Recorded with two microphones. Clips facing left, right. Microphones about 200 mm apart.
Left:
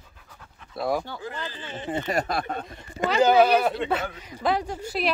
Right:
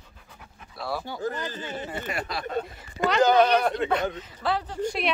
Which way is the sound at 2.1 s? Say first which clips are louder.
Left 1 dB; 45° left (ahead or behind).